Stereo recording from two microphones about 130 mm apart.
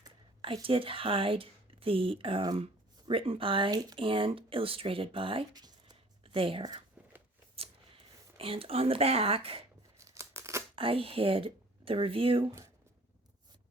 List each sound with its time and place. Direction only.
0.4 s speech: 45° right (ahead or behind)
5.5 s a sound: 30° right (ahead or behind)
6.2 s speech: 45° right (ahead or behind)
8.4 s speech: 45° right (ahead or behind)
10.0 s scissors: 20° right (ahead or behind)
10.8 s speech: 45° right (ahead or behind)